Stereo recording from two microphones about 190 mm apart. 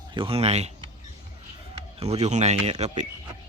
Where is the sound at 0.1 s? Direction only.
25° right (ahead or behind).